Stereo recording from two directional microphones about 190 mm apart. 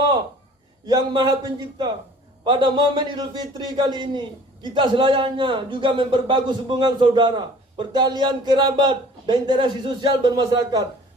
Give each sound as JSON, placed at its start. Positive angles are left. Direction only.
{"t": 0.9, "sound": "a man's voice", "side_deg": -25}